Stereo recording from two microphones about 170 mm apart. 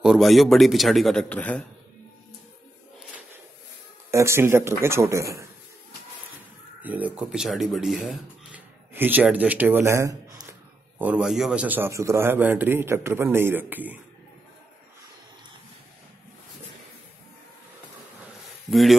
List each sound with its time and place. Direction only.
0.0 s a man's voice: centre (ahead or behind)
4.1 s a man's voice: 15° right (ahead or behind)
6.8 s speech: 10° right (ahead or behind)
11.0 s a man's voice: 5° right (ahead or behind)
18.7 s a man's voice: centre (ahead or behind)